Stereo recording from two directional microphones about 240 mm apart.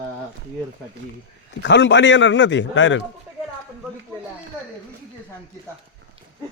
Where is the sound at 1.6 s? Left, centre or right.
Left.